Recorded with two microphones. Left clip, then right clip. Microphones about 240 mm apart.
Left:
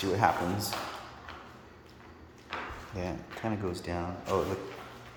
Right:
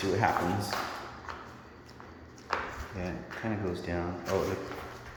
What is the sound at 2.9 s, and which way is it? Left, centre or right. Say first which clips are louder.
A man's voice: left 3 dB; centre.